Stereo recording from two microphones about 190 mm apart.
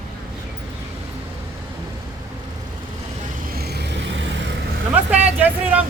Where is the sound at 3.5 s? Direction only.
60° right (ahead or behind).